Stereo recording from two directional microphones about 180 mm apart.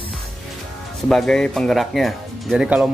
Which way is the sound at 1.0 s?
5° left (ahead or behind).